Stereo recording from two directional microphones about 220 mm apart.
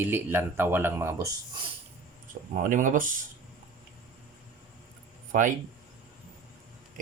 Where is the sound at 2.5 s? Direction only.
35° right (ahead or behind).